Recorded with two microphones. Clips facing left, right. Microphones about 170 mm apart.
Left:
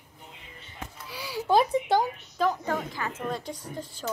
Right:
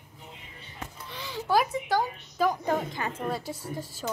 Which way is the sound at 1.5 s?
25° left (ahead or behind).